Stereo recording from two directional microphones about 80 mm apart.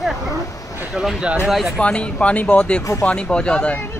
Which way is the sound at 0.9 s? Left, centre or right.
Centre.